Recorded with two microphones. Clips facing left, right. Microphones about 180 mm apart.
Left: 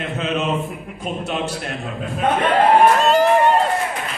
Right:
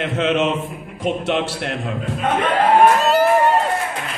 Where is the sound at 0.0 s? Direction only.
90° right.